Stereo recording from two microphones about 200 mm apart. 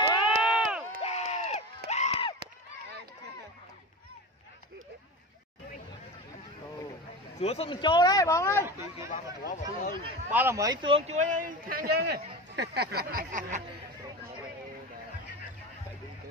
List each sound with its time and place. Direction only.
0.4 s run: 5° right (ahead or behind)
1.0 s a sound: 30° left (ahead or behind)
7.3 s speech: 30° left (ahead or behind); by 8.6 s 15° left (ahead or behind)
9.4 s speech: 40° left (ahead or behind)
10.3 s speech: 10° right (ahead or behind); by 13.6 s 40° right (ahead or behind)